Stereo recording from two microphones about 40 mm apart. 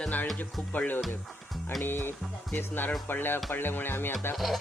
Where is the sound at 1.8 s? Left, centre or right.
Left.